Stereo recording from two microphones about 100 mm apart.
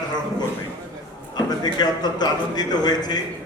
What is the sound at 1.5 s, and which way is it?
A man's voice, 45° left (ahead or behind).